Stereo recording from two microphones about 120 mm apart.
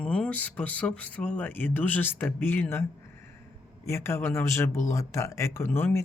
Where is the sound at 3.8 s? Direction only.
20° left (ahead or behind).